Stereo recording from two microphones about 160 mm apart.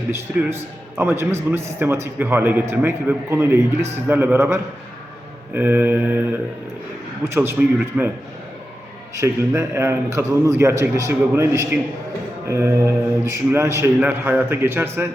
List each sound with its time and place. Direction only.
0.1 s a man's voice: 15° right (ahead or behind)
7.6 s a man's voice: 15° right (ahead or behind)
9.1 s a man's voice: 15° right (ahead or behind)